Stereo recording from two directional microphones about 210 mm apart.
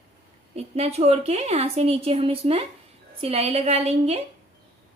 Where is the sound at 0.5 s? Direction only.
30° right (ahead or behind).